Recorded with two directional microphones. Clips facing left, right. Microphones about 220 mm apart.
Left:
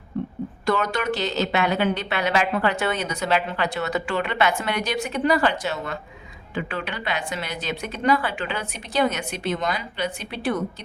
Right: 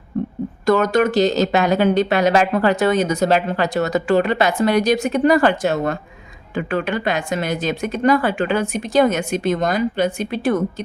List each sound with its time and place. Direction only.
0.6 s speech: 45° right (ahead or behind)